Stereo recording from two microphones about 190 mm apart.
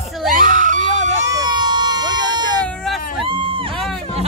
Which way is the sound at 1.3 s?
20° right (ahead or behind).